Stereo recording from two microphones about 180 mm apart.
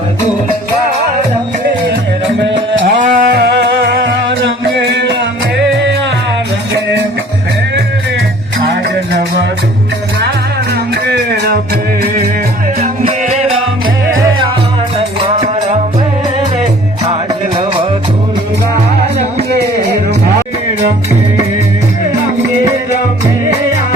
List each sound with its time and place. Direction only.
2.8 s music: 45° right (ahead or behind); by 4.9 s 80° right
12.8 s music: 40° right (ahead or behind)
14.9 s music: 35° right (ahead or behind)